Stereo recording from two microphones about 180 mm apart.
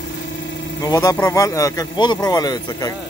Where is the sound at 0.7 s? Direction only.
20° left (ahead or behind).